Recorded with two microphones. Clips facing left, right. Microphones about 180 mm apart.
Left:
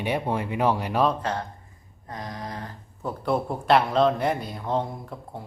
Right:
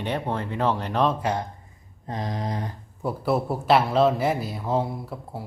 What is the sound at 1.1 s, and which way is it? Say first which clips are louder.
Speech: right 3 dB; 10° right (ahead or behind).